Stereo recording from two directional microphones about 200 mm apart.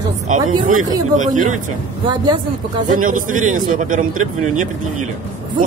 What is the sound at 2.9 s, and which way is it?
A man's voice, 40° right (ahead or behind).